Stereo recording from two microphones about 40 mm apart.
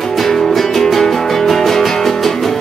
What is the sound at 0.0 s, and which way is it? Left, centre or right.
Music, centre.